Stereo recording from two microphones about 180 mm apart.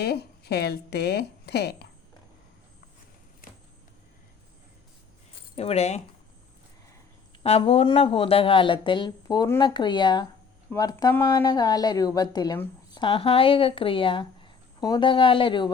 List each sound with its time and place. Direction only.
0.0 s a woman's voice: 65° left (ahead or behind)
5.5 s speech: 35° left (ahead or behind)
7.4 s speech: 35° left (ahead or behind)